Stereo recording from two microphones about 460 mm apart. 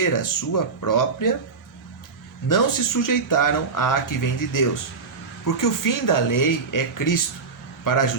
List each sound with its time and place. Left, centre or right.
0.0 s speech: left
2.5 s speech: left